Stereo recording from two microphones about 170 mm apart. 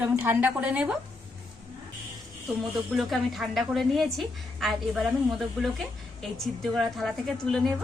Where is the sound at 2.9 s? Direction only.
Centre (ahead or behind).